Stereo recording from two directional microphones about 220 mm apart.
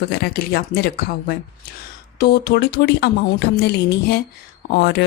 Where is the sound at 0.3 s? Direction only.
45° left (ahead or behind).